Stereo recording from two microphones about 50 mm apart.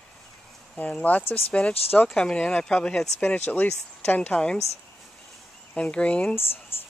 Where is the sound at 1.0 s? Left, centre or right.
Left.